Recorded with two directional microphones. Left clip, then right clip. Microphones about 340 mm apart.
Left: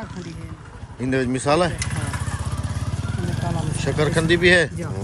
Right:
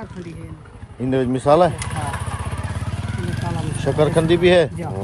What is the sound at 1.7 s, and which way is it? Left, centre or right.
Vehicle, centre.